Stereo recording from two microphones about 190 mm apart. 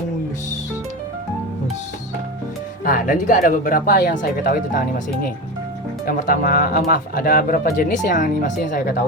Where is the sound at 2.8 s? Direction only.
45° left (ahead or behind).